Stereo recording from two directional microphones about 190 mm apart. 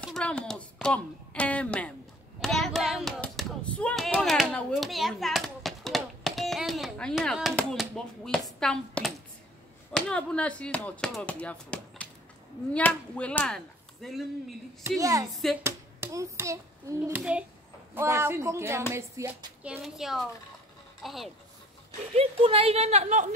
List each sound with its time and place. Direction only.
0.0 s a child's voice: 5° left (ahead or behind)
15.0 s a child's voice: 15° right (ahead or behind); by 21.3 s centre (ahead or behind)
22.1 s a woman's voice: 30° right (ahead or behind)